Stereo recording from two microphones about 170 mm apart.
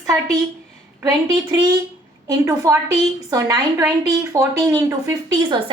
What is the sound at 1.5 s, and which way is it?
A woman's voice, 20° right (ahead or behind).